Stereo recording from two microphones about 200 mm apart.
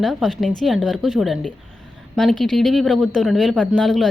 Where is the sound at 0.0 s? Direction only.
Centre (ahead or behind).